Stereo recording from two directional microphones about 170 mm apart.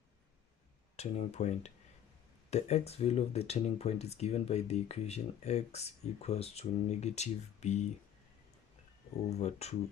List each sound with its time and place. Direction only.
0.9 s speech: 40° left (ahead or behind)
9.3 s speech: 40° left (ahead or behind)